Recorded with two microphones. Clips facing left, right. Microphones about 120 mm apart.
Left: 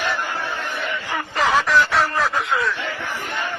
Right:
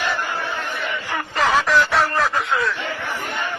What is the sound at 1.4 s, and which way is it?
Radio, centre (ahead or behind).